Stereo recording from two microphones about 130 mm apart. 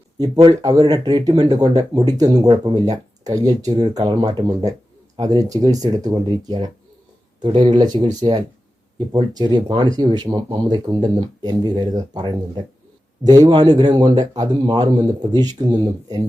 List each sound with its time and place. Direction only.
0.6 s speech: 30° right (ahead or behind)